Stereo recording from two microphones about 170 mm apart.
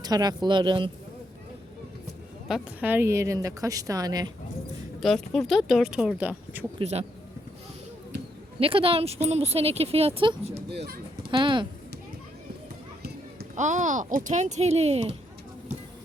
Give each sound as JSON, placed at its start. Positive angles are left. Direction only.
{"t": 0.0, "sound": "a woman's voice", "side_deg": -25}
{"t": 2.5, "sound": "a woman's voice", "side_deg": -10}
{"t": 5.0, "sound": "speech", "side_deg": 0}
{"t": 6.7, "sound": "a woman's voice", "side_deg": -40}
{"t": 8.5, "sound": "a woman's voice", "side_deg": -35}
{"t": 10.7, "sound": "speech", "side_deg": -75}
{"t": 11.3, "sound": "a woman's voice", "side_deg": -30}
{"t": 13.6, "sound": "speech", "side_deg": -45}